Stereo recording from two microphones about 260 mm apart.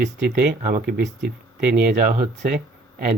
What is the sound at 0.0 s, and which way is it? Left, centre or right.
Speech, right.